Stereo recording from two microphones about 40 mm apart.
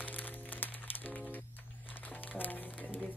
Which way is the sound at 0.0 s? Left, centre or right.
Left.